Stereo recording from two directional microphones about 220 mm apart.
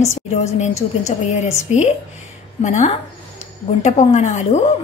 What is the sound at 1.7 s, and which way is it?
A woman's voice, 30° left (ahead or behind).